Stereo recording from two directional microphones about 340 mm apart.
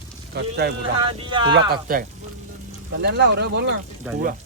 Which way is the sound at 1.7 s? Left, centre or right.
Right.